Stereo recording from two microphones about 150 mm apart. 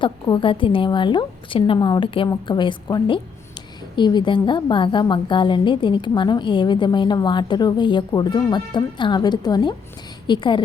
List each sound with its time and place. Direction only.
0.0 s a woman's voice: 35° left (ahead or behind)